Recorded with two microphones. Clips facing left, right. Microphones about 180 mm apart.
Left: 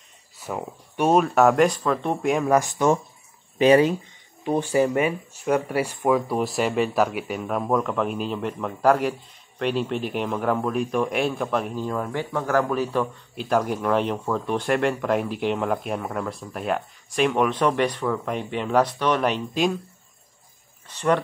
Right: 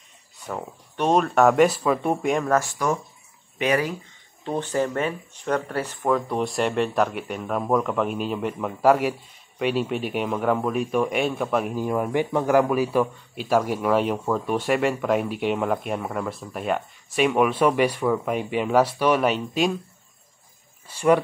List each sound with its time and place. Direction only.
0.5 s speech: 10° left (ahead or behind)
2.5 s speech: 20° left (ahead or behind)
4.5 s speech: 10° left (ahead or behind)
20.8 s speech: 10° right (ahead or behind)